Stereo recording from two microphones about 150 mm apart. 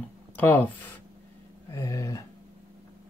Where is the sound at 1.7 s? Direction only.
20° left (ahead or behind).